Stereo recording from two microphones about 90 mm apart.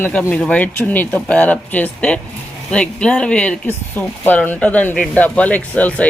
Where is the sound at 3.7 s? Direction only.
20° left (ahead or behind).